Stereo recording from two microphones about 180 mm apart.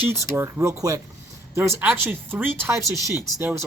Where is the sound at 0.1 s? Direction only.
15° right (ahead or behind).